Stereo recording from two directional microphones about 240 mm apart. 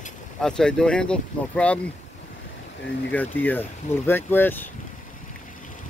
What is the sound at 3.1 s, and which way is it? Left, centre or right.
Speech, centre.